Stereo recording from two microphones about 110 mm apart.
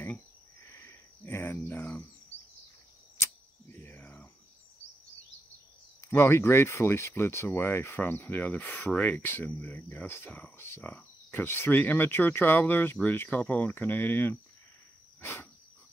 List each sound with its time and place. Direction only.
0.6 s a sound: 25° left (ahead or behind)
3.2 s arrow: 20° left (ahead or behind)
5.9 s speech: 25° left (ahead or behind)